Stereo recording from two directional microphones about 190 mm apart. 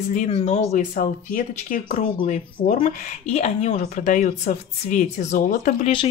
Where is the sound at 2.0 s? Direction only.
35° left (ahead or behind).